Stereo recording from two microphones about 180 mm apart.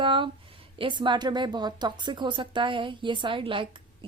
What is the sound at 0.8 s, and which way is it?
Speech, 25° right (ahead or behind).